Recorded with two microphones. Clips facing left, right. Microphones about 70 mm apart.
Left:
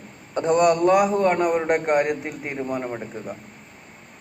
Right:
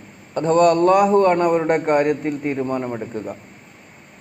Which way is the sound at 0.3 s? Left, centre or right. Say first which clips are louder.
Right 3 dB; centre.